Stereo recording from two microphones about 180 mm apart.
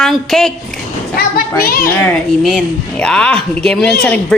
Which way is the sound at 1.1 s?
55° left (ahead or behind).